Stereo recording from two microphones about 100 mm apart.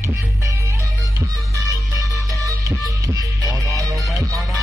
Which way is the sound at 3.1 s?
35° right (ahead or behind).